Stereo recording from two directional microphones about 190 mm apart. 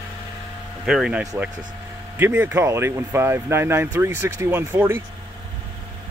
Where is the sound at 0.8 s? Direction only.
5° right (ahead or behind).